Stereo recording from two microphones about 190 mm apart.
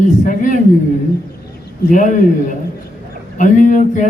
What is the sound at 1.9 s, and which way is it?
Speech, 40° left (ahead or behind).